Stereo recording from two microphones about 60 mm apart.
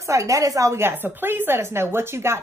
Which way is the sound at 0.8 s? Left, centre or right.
Right.